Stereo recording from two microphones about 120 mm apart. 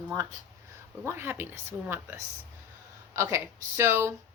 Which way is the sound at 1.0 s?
20° right (ahead or behind).